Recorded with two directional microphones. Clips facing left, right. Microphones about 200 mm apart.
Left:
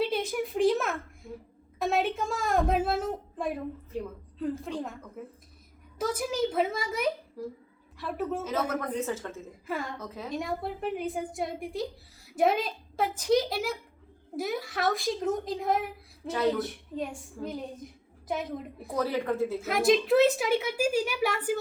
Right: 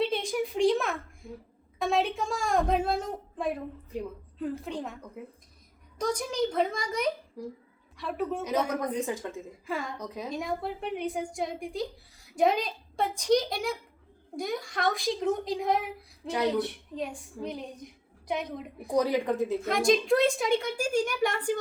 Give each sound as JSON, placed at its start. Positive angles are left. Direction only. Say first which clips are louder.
{"t": 0.0, "sound": "a sound", "louder": "even", "side_deg": 5}
{"t": 1.2, "sound": "speech", "louder": "even", "side_deg": 0}
{"t": 1.8, "sound": "a sound", "louder": "even", "side_deg": 0}
{"t": 3.9, "sound": "a woman's voice", "louder": "right 1 dB", "side_deg": -15}
{"t": 4.6, "sound": "a woman's voice", "louder": "left 1 dB", "side_deg": 0}
{"t": 6.0, "sound": "a woman's voice", "louder": "even", "side_deg": 5}
{"t": 7.4, "sound": "a woman's voice", "louder": "left 1 dB", "side_deg": -15}
{"t": 7.9, "sound": "a woman's voice", "louder": "even", "side_deg": 0}
{"t": 8.4, "sound": "a woman's voice", "louder": "right 2 dB", "side_deg": -15}
{"t": 10.2, "sound": "a woman's voice", "louder": "even", "side_deg": 0}
{"t": 16.3, "sound": "a woman's voice", "louder": "left 1 dB", "side_deg": -15}
{"t": 16.6, "sound": "a woman's voice", "louder": "right 2 dB", "side_deg": 0}
{"t": 18.9, "sound": "a woman's voice", "louder": "right 2 dB", "side_deg": -15}
{"t": 19.6, "sound": "a woman's voice", "louder": "left 1 dB", "side_deg": 5}